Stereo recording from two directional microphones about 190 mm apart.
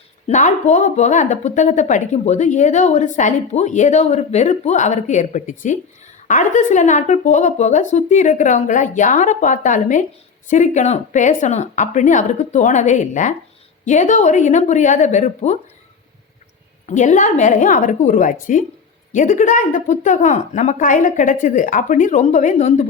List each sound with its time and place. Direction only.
0.3 s speech: 40° left (ahead or behind)
16.8 s speech: 40° left (ahead or behind)